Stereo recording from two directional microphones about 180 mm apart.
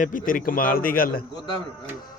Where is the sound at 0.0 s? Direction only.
50° left (ahead or behind).